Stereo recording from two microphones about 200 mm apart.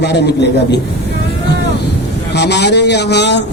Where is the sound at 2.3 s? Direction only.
60° left (ahead or behind).